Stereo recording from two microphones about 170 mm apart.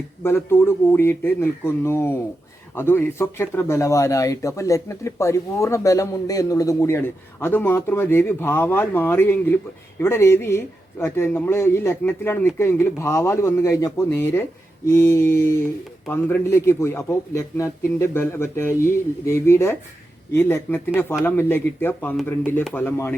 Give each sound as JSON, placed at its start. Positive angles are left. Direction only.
{"t": 0.2, "sound": "speech", "side_deg": 15}